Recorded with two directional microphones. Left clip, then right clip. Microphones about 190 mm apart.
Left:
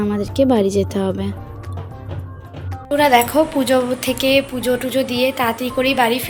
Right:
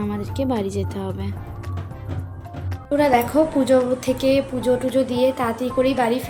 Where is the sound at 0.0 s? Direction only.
30° left (ahead or behind).